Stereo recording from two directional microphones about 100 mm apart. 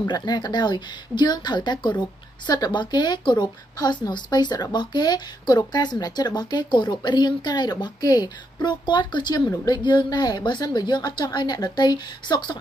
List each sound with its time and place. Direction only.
0.0 s speech: 45° left (ahead or behind)